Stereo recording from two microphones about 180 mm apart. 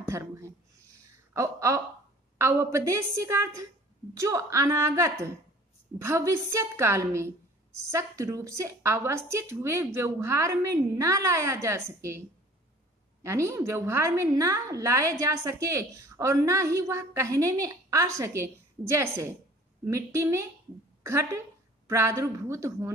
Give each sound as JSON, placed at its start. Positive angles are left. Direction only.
{"t": 0.1, "sound": "a woman's voice", "side_deg": -15}